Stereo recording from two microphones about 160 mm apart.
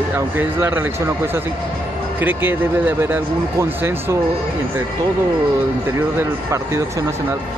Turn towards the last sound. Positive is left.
turn(degrees=-15)  # may be behind; listen again after turning